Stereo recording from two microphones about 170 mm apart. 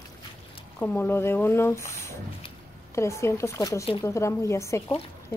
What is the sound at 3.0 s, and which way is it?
A woman's voice, 15° left (ahead or behind).